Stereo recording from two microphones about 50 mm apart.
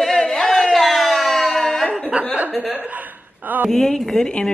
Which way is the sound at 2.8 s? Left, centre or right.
Right.